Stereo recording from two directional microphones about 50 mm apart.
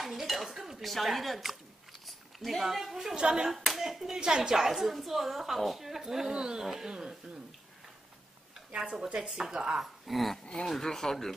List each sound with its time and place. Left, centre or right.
0.0 s dishes: centre
3.4 s speech: centre
8.7 s speech: centre
10.4 s speech: left
10.7 s speech: centre